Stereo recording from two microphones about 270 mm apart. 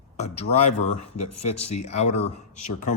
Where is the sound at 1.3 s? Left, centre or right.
Left.